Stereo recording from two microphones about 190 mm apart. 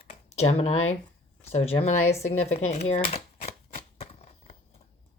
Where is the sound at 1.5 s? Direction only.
30° left (ahead or behind).